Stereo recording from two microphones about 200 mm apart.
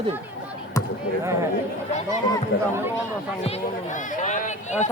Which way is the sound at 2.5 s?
55° left (ahead or behind).